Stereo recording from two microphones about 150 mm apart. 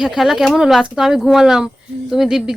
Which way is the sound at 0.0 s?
5° right (ahead or behind).